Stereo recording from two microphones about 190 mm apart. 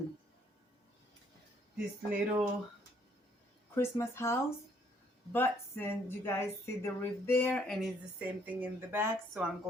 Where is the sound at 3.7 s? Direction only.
15° left (ahead or behind).